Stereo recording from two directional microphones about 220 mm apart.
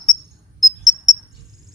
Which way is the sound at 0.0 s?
15° left (ahead or behind).